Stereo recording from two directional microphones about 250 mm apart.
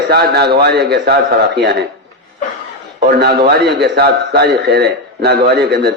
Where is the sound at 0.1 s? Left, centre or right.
Right.